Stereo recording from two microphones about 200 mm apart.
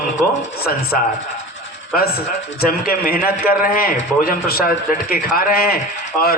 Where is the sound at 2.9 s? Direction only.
45° left (ahead or behind).